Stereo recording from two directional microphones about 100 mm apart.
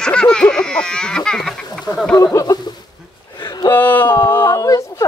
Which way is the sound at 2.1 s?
35° left (ahead or behind).